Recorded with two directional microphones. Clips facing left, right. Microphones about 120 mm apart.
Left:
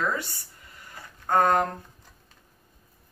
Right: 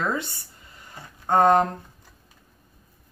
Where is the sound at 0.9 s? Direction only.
25° right (ahead or behind).